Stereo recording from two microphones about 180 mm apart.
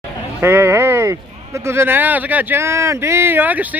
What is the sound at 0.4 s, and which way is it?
A man's voice, 15° right (ahead or behind).